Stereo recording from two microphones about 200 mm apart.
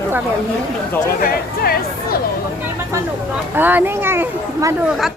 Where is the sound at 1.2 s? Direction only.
50° left (ahead or behind).